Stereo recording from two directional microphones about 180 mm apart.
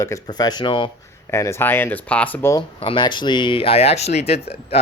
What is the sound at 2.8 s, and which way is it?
Speech, 25° left (ahead or behind).